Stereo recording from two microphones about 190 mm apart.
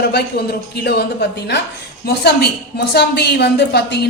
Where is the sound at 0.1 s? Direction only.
60° left (ahead or behind).